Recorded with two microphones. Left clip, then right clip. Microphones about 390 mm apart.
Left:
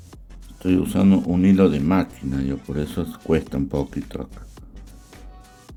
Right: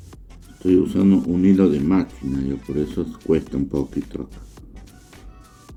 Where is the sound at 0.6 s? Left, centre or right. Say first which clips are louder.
Right 3 dB; left.